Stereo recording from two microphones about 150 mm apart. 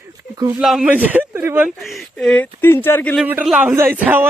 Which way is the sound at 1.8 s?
Centre (ahead or behind).